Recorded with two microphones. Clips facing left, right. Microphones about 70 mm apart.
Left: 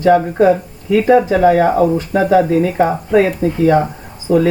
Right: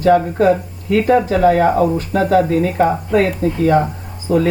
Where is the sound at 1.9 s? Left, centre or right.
Centre.